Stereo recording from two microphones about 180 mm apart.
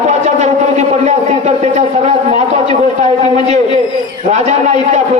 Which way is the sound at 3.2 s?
40° right (ahead or behind).